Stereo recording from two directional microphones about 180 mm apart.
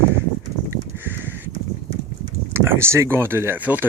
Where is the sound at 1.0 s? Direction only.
10° right (ahead or behind).